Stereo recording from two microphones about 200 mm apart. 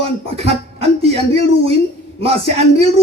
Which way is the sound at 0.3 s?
30° right (ahead or behind).